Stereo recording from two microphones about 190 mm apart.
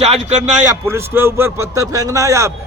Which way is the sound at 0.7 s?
15° right (ahead or behind).